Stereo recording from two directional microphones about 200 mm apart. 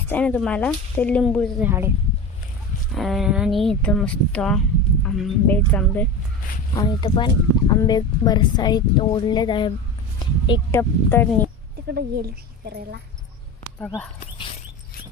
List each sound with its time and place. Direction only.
0.1 s speech: 5° left (ahead or behind)
1.6 s speech: 10° right (ahead or behind)
2.9 s speech: centre (ahead or behind)
6.7 s speech: 20° left (ahead or behind)
10.7 s speech: 10° left (ahead or behind)
11.9 s speech: 50° right (ahead or behind)
13.7 s speech: 10° left (ahead or behind)